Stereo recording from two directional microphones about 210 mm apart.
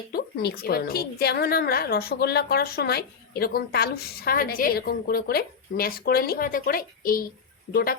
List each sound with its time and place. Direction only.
0.1 s a woman's voice: 50° left (ahead or behind)